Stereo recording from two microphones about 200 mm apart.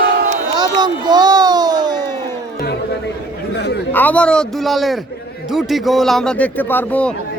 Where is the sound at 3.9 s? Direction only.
10° left (ahead or behind).